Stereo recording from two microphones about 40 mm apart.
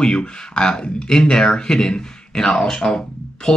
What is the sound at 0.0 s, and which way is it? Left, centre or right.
Speech, centre.